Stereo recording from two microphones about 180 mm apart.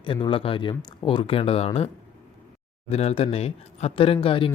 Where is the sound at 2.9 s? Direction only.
35° left (ahead or behind).